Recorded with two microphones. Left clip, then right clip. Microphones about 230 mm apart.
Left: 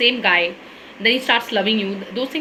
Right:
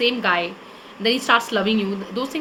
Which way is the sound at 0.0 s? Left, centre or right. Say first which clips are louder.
Left 4 dB; centre.